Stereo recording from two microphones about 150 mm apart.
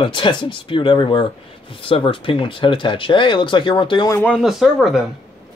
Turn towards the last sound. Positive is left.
turn(degrees=0)  # may be behind; listen again after turning